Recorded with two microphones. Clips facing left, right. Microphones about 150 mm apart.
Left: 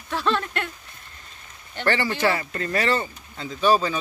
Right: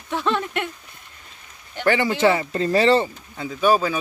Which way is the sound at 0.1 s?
15° right (ahead or behind).